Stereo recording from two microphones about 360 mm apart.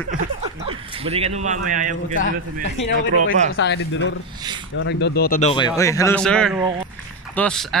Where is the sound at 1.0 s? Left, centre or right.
Centre.